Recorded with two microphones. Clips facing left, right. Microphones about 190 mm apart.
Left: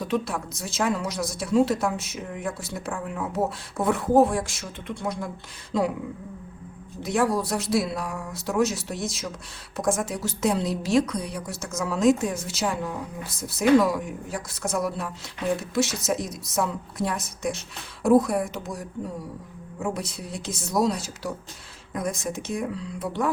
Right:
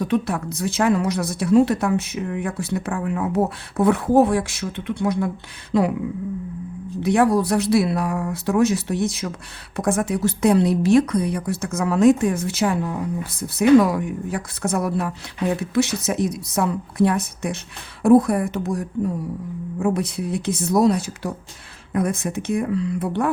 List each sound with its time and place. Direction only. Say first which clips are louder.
0.0 s a woman's voice: right 5 dB; 60° right (ahead or behind)
7.0 s a woman's voice: right 6 dB; 60° right (ahead or behind)
19.8 s a woman's voice: right 8 dB; 60° right (ahead or behind)